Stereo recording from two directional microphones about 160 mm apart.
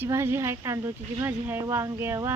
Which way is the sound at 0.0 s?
15° right (ahead or behind).